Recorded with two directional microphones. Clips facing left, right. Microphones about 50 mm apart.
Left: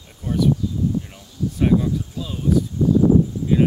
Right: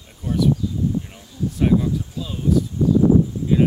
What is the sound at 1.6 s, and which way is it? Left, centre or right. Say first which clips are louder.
Speech: even; centre.